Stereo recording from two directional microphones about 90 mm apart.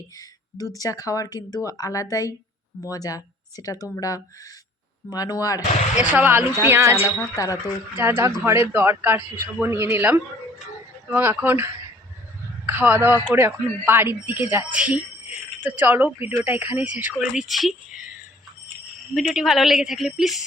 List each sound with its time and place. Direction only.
0.2 s speech: 40° left (ahead or behind)
5.1 s speech: 40° left (ahead or behind)
6.0 s speech: 20° right (ahead or behind)
7.2 s speech: 40° left (ahead or behind)
7.9 s a man's voice: 25° right (ahead or behind)
17.3 s speech: centre (ahead or behind)
19.1 s speech: 5° right (ahead or behind)